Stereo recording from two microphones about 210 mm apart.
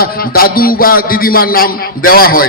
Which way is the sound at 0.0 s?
45° left (ahead or behind).